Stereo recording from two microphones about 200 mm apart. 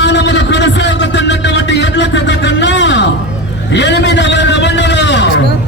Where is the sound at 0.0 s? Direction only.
60° left (ahead or behind).